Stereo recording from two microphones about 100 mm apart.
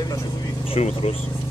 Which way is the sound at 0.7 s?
80° left.